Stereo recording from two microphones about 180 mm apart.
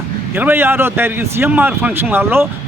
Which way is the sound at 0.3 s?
10° right (ahead or behind).